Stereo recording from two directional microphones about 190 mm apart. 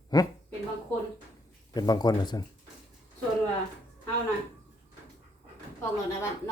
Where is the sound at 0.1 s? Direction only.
20° left (ahead or behind).